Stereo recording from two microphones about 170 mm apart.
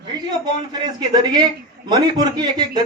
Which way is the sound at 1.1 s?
25° right (ahead or behind).